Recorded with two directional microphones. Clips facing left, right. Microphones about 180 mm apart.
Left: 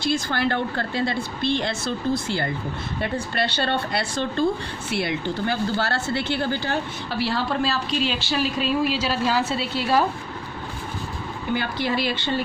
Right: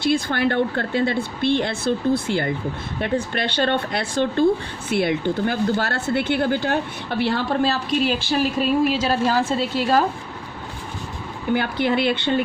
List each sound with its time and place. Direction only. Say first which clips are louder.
0.0 s speech: right 3 dB; 55° right (ahead or behind)
11.5 s speech: right 4 dB; 55° right (ahead or behind)